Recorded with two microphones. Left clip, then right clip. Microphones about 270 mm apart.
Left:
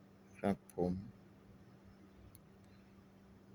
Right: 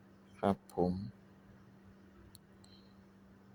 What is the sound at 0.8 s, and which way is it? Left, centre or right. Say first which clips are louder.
Speech: right 4 dB; right.